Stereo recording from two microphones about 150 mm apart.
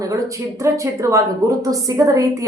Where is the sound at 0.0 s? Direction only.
20° right (ahead or behind).